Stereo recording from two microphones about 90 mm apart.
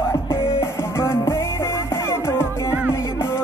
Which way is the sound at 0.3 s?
30° left (ahead or behind).